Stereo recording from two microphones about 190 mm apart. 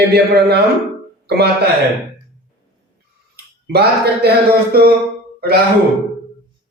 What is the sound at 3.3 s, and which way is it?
Speech, 55° right (ahead or behind).